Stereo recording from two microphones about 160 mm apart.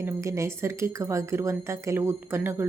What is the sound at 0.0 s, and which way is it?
Speech, 15° right (ahead or behind).